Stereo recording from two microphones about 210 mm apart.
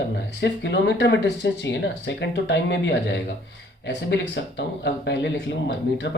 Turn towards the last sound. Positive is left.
turn(degrees=55)  # may be behind; listen again after turning